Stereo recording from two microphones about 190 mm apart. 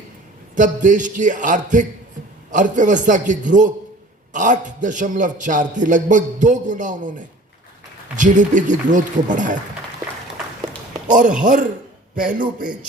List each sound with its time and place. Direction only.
0.5 s a man's voice: 40° right (ahead or behind)
8.1 s a man's voice: 40° right (ahead or behind)
12.1 s a man's voice: 45° right (ahead or behind)